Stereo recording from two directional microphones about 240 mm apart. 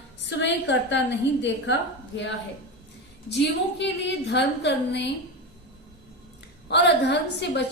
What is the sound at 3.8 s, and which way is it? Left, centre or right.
A woman's voice, left.